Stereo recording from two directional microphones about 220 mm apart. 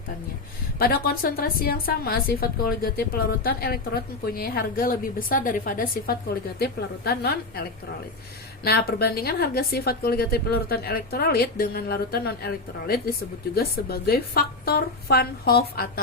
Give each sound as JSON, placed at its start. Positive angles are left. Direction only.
{"t": 0.8, "sound": "a woman's voice", "side_deg": 45}